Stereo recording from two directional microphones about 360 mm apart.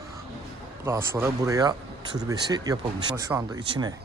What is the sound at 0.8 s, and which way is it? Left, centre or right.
Speech, centre.